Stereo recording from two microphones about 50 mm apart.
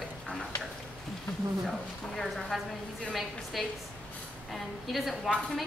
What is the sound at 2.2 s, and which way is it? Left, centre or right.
A woman's voice, centre.